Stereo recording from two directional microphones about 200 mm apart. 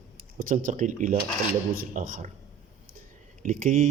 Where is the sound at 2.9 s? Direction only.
40° right (ahead or behind).